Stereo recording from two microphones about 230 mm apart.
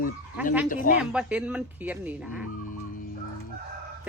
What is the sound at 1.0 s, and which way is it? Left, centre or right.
Speech, centre.